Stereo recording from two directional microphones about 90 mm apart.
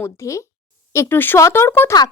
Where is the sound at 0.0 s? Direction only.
35° left (ahead or behind).